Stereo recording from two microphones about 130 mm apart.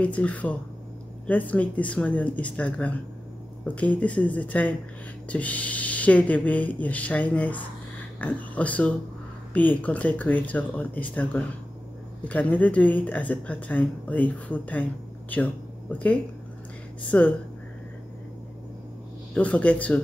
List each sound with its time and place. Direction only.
0.0 s a woman's voice: 10° left (ahead or behind)
19.3 s a woman's voice: 10° left (ahead or behind)